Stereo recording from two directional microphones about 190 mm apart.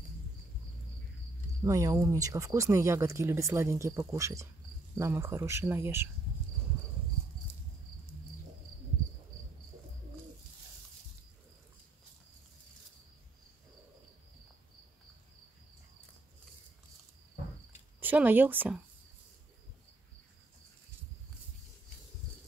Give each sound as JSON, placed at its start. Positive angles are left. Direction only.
{"t": 1.6, "sound": "speech", "side_deg": -15}
{"t": 18.0, "sound": "speech", "side_deg": -10}